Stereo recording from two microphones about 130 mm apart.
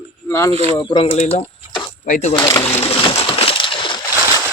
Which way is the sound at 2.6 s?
50° left (ahead or behind).